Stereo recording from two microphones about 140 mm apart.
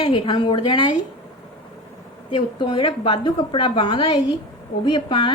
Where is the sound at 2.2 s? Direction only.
35° left (ahead or behind).